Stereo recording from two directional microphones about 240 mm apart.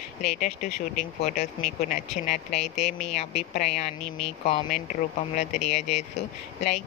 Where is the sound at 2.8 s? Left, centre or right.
Left.